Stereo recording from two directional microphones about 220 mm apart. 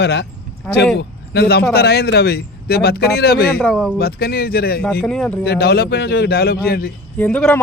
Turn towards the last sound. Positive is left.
turn(degrees=5)  # may be behind; listen again after turning